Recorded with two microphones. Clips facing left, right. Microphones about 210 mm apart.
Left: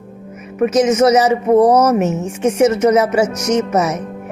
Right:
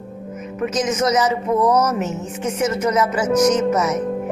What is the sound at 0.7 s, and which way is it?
Speech, 65° left (ahead or behind).